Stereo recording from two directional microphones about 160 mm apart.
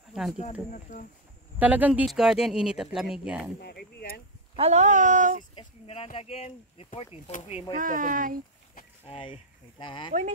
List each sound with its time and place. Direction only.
0.1 s speech: centre (ahead or behind)
0.4 s speech: 50° left (ahead or behind)
1.6 s speech: 10° right (ahead or behind)
3.6 s a sound: 80° left
4.6 s speech: 45° right (ahead or behind)
5.5 s speech: 35° left (ahead or behind)
7.7 s speech: 60° right (ahead or behind)
9.0 s speech: 35° left (ahead or behind)